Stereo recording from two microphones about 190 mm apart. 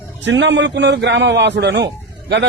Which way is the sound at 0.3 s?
70° right (ahead or behind).